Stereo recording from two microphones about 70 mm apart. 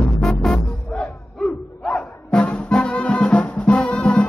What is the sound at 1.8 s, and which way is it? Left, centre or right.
Music, centre.